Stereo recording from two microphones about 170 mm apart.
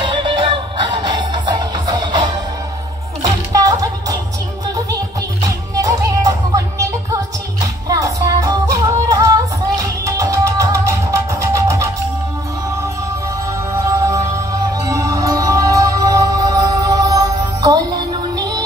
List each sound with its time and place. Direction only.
0.0 s music: 30° right (ahead or behind)
5.4 s music: 20° right (ahead or behind)
7.6 s yodeling: 20° right (ahead or behind)
10.0 s music: 20° right (ahead or behind)
13.7 s music: 20° right (ahead or behind)